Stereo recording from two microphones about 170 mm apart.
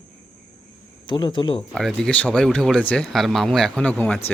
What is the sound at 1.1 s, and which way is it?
Speech, 25° left (ahead or behind).